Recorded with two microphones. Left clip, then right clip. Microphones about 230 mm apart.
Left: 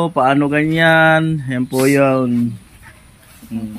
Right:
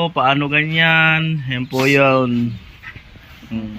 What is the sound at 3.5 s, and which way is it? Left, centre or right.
Speech, centre.